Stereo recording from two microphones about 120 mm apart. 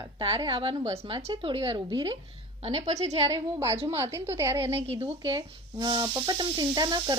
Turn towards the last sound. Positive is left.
turn(degrees=-35)  # may be behind; listen again after turning